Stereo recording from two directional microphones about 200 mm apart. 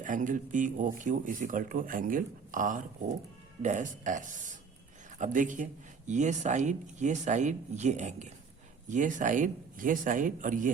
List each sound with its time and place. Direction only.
0.0 s speech: 40° right (ahead or behind)